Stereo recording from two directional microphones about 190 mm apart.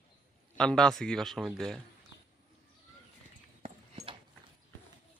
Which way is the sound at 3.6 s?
30° right (ahead or behind).